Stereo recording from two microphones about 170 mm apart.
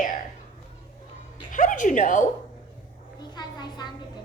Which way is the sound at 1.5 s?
50° left (ahead or behind).